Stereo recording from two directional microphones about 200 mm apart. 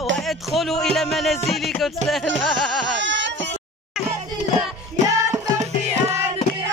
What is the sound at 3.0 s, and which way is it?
Baby cry, 65° right (ahead or behind).